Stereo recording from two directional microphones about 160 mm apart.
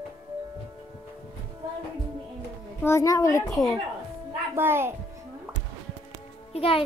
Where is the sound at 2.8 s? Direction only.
20° left (ahead or behind).